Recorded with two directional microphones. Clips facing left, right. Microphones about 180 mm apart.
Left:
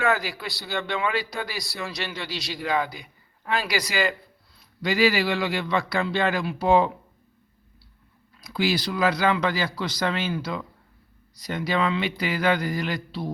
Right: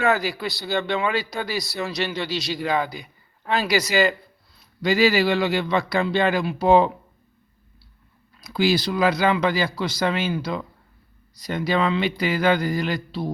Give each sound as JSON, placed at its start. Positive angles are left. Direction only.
{"t": 0.0, "sound": "speech", "side_deg": -25}
{"t": 8.5, "sound": "speech", "side_deg": -30}
{"t": 11.4, "sound": "speech", "side_deg": -30}